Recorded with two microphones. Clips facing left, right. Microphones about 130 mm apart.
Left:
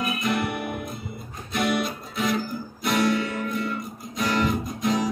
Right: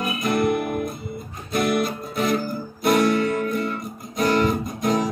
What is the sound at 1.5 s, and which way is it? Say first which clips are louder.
Music: right 3 dB; 50° right (ahead or behind).